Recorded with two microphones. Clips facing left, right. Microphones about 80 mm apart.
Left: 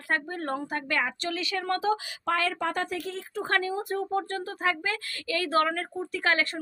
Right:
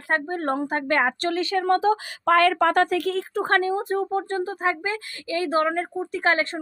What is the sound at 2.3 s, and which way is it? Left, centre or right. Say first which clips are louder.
Speech: right 11 dB; right.